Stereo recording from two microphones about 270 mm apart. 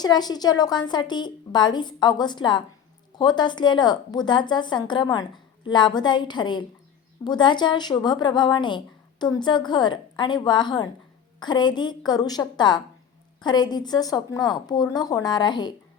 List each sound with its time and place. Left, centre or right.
0.0 s speech: centre